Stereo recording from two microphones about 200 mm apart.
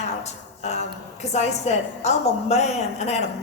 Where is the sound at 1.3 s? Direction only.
35° left (ahead or behind).